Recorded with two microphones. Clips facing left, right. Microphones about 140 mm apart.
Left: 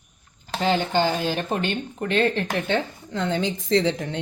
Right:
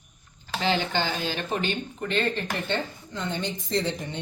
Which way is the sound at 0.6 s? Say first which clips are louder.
Left 5 dB; 45° left (ahead or behind).